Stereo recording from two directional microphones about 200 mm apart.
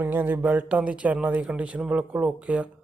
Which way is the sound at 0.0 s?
10° right (ahead or behind).